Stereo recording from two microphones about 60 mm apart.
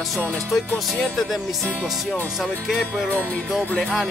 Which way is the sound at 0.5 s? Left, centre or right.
Centre.